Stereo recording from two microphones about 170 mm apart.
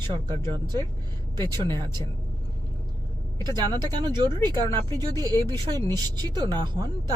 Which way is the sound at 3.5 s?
25° right (ahead or behind).